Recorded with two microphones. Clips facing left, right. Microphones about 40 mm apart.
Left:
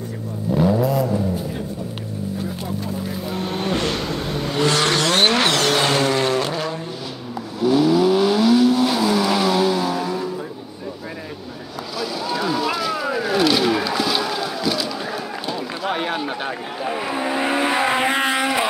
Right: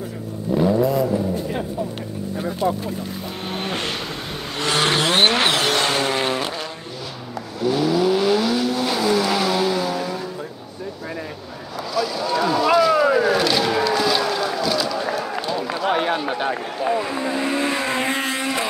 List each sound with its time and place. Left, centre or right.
0.6 s vehicle: centre
4.7 s vehicle: centre
5.8 s vehicle: centre
6.0 s vehicle: centre
11.9 s a sound: centre
16.9 s vehicle: centre